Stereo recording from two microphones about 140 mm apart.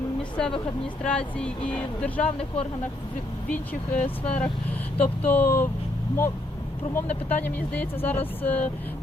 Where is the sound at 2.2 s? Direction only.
45° left (ahead or behind).